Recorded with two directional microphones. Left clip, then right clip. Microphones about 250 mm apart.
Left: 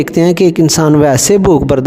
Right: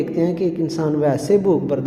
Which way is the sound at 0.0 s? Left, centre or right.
Left.